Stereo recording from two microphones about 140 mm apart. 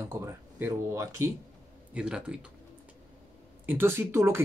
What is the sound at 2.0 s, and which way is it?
Speech, 5° right (ahead or behind).